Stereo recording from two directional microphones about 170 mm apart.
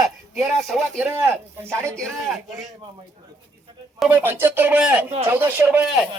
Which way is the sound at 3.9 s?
10° right (ahead or behind).